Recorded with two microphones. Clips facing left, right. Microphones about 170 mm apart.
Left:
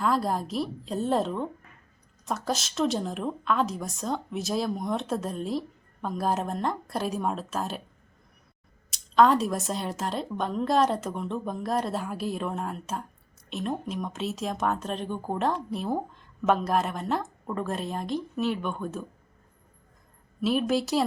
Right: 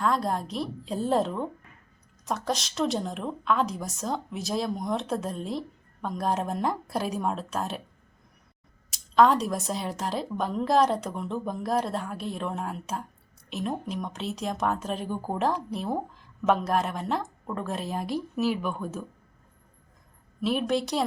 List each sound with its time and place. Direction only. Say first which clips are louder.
0.0 s speech: even; centre (ahead or behind)
8.9 s speech: even; centre (ahead or behind)
20.4 s speech: left 1 dB; centre (ahead or behind)